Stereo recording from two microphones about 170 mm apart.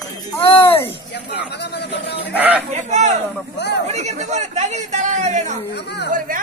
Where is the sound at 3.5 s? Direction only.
85° left.